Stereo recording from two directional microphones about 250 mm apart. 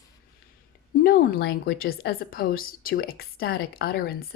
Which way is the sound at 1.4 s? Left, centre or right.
Left.